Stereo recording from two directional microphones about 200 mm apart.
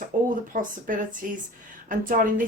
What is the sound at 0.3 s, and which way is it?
Speech, 40° right (ahead or behind).